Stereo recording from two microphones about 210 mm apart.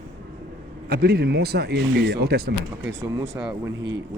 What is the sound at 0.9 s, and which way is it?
Speech, 50° right (ahead or behind).